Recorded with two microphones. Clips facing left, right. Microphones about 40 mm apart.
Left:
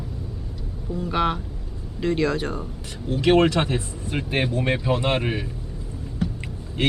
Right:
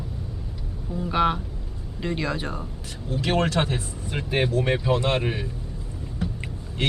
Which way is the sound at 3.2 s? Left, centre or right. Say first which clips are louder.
Left 6 dB; left.